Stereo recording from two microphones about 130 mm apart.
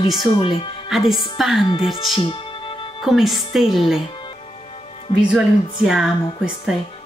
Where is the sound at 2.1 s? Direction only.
40° left (ahead or behind).